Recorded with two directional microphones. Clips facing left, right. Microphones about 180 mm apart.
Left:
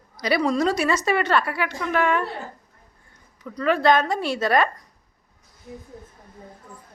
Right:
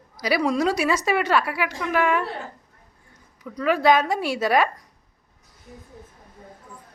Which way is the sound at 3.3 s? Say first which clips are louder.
Even; 5° right (ahead or behind).